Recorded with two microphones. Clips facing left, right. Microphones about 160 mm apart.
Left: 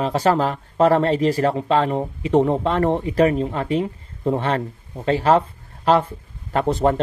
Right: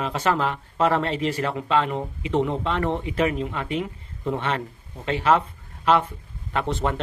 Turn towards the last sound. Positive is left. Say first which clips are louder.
# left 7 dB
turn(degrees=40)  # may be behind; listen again after turning